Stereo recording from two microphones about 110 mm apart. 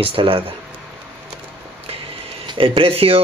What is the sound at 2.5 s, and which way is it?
Speech, 55° right (ahead or behind).